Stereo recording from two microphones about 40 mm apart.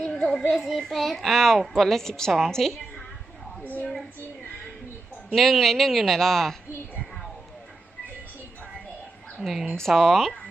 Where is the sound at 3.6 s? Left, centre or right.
Left.